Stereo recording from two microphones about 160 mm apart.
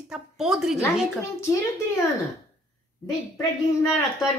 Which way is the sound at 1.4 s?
20° left (ahead or behind).